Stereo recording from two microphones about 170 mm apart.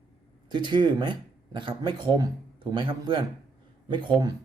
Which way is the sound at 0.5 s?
25° right (ahead or behind).